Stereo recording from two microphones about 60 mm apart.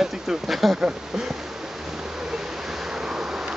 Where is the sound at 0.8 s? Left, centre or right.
Centre.